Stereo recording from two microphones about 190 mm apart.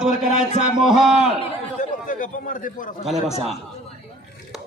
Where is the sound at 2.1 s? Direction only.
45° left (ahead or behind).